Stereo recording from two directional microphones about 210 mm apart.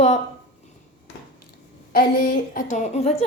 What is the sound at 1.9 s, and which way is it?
A woman's voice, 45° left (ahead or behind).